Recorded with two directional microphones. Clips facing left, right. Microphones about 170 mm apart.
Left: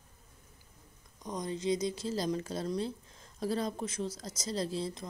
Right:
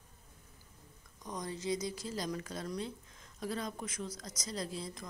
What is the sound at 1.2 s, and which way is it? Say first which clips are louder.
A woman's voice: left 5 dB; 20° left (ahead or behind).